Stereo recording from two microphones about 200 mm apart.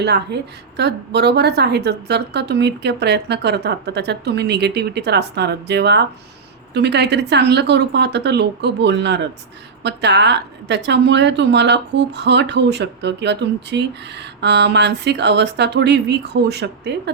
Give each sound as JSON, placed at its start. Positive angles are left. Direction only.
{"t": 0.0, "sound": "a woman's voice", "side_deg": -55}